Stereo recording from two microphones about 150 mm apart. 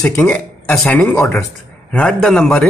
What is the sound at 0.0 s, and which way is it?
Speech, 15° left (ahead or behind).